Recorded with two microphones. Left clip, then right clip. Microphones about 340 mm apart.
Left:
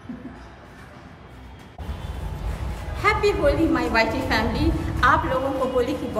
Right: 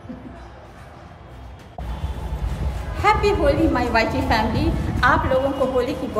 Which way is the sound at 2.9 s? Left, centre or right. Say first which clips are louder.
Right 3 dB; centre.